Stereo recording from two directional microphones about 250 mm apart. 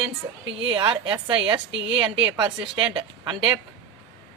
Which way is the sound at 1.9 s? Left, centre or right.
Centre.